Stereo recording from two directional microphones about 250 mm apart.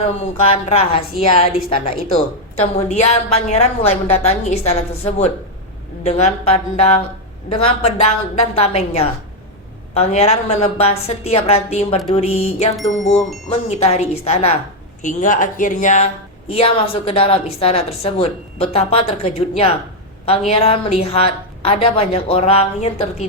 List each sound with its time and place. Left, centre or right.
0.4 s a woman's voice: left